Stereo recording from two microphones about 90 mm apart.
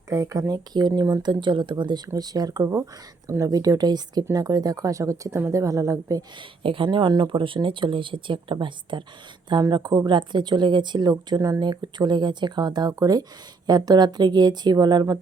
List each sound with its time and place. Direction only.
0.1 s speech: 35° right (ahead or behind); by 2.0 s 60° right (ahead or behind)
2.1 s speech: 45° right (ahead or behind)
6.6 s speech: 75° right (ahead or behind); by 11.3 s 55° right (ahead or behind)
11.3 s speech: 40° right (ahead or behind)
11.6 s speech: 55° right (ahead or behind)